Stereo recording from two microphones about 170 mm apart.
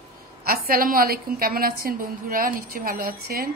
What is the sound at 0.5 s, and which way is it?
A woman's voice, 60° right (ahead or behind).